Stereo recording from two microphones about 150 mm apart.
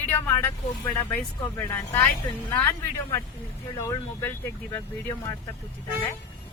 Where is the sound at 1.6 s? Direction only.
15° left (ahead or behind).